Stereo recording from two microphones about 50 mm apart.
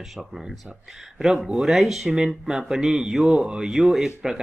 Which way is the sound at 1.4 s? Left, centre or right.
Centre.